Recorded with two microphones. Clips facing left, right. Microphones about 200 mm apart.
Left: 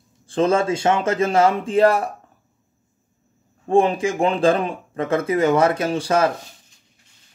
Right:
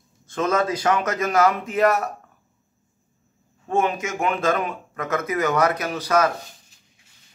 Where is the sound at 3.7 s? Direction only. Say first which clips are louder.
Left 6 dB; 30° left (ahead or behind).